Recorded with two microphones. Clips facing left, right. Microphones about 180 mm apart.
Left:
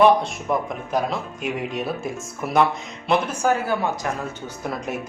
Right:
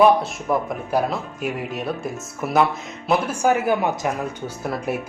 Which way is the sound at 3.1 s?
15° right (ahead or behind).